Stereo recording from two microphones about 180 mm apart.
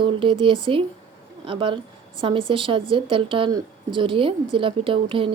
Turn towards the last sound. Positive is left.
turn(degrees=-30)  # may be behind; listen again after turning